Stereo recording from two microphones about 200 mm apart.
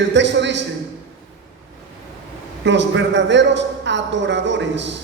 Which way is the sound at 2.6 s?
65° right (ahead or behind).